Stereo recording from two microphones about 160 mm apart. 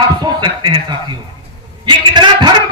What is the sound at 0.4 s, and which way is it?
A man's voice, 30° right (ahead or behind).